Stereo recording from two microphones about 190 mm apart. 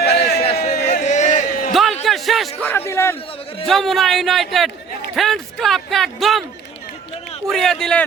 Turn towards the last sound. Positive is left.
turn(degrees=0)  # may be behind; listen again after turning